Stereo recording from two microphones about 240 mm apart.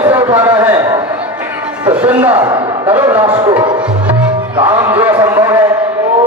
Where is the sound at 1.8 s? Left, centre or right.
Centre.